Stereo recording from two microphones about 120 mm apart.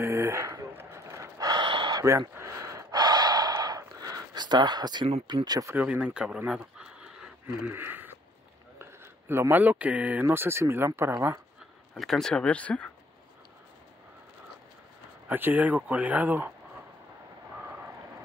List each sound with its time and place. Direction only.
0.0 s gasp: 25° right (ahead or behind)
5.3 s speech: 35° right (ahead or behind)
5.7 s speech: 10° right (ahead or behind)
7.4 s a man's voice: 15° right (ahead or behind)
11.9 s speech: 5° left (ahead or behind)
15.2 s speech: 15° right (ahead or behind)